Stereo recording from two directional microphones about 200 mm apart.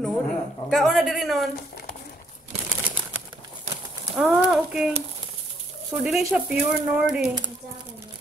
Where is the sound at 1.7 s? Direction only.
50° left (ahead or behind).